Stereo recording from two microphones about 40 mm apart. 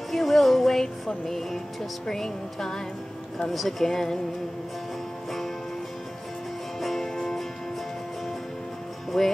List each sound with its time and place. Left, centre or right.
0.1 s music: centre
2.0 s a woman's voice: centre
3.5 s music: centre
6.8 s music: centre
9.1 s a woman's voice: centre